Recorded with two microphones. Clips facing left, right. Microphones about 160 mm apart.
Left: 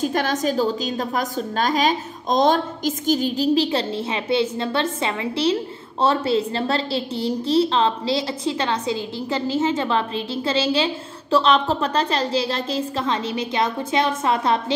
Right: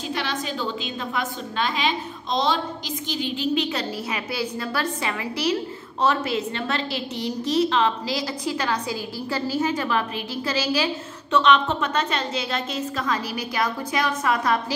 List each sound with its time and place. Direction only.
0.0 s a woman's voice: 45° left (ahead or behind); by 14.6 s 25° left (ahead or behind)